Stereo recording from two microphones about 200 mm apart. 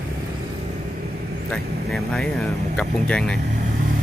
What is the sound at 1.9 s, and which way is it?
Speech, centre (ahead or behind).